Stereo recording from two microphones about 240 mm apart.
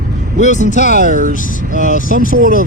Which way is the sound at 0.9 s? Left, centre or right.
Right.